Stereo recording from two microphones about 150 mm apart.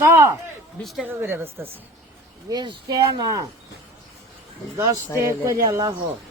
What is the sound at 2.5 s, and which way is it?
Speech, 25° right (ahead or behind).